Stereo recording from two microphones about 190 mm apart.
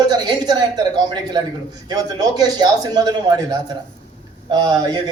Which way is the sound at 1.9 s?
20° right (ahead or behind).